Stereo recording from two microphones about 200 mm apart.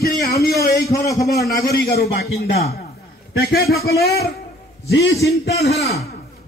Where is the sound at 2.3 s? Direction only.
30° left (ahead or behind).